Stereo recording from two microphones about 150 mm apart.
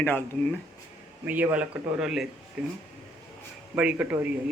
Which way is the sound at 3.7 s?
10° right (ahead or behind).